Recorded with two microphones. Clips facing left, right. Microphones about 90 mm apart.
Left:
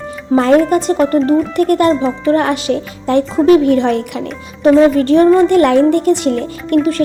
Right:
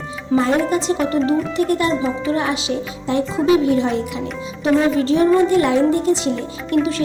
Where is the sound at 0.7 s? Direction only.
50° left (ahead or behind).